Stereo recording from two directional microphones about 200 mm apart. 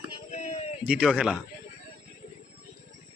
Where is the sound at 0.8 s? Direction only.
5° right (ahead or behind).